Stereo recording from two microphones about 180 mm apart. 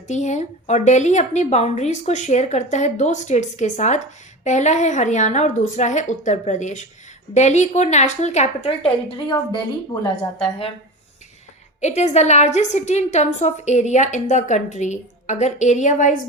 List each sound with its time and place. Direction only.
0.1 s a woman's voice: 40° left (ahead or behind)
9.0 s a woman's voice: 25° left (ahead or behind)
11.8 s a woman's voice: 40° left (ahead or behind)